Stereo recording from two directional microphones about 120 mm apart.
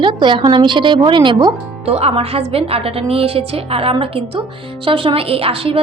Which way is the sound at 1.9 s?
55° right (ahead or behind).